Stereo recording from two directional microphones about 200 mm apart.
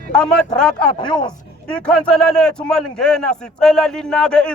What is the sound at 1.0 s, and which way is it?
Speech, 25° left (ahead or behind).